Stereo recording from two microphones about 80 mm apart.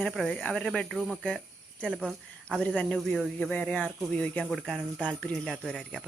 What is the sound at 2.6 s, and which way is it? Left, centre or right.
Speech, centre.